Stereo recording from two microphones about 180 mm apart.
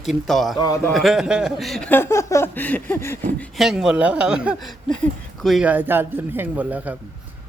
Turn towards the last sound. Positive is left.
turn(degrees=-10)  # may be behind; listen again after turning